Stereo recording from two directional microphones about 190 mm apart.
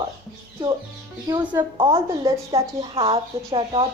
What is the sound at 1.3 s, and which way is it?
A woman's voice, 20° right (ahead or behind).